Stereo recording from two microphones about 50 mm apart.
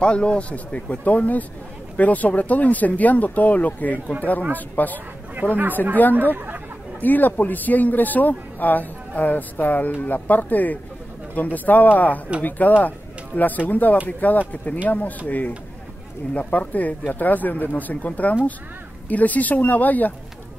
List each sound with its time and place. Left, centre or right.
0.0 s speech: left
6.1 s speech: right
7.0 s speech: left